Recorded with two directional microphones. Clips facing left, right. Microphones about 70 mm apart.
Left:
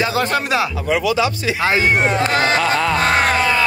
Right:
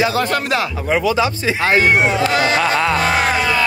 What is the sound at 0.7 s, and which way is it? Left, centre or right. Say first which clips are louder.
Speech: right 1 dB; right.